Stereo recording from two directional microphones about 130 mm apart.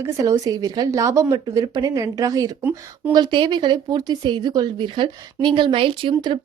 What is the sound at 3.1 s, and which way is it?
Speech, 35° right (ahead or behind).